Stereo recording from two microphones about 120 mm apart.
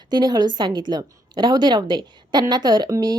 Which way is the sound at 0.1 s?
35° right (ahead or behind).